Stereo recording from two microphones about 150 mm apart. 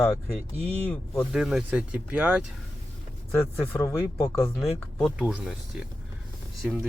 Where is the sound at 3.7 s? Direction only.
20° left (ahead or behind).